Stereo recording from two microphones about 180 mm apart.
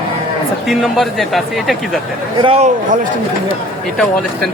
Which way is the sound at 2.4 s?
35° right (ahead or behind).